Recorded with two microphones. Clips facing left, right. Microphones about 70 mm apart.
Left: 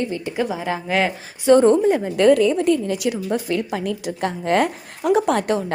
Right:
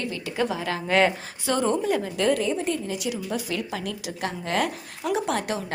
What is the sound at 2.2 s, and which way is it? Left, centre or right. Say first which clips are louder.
Speech: left 11 dB; left.